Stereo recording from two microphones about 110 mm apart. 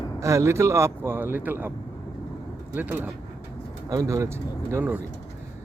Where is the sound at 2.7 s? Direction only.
15° right (ahead or behind).